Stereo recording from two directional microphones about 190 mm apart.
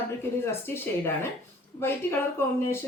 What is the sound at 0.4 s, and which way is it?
Speech, 15° left (ahead or behind).